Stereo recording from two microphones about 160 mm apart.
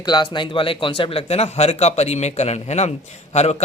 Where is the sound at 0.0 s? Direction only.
30° left (ahead or behind).